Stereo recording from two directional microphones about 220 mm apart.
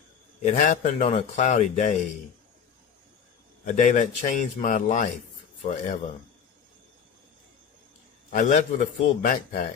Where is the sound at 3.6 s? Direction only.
35° left (ahead or behind).